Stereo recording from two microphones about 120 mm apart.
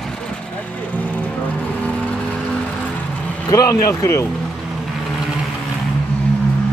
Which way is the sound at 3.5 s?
30° left (ahead or behind).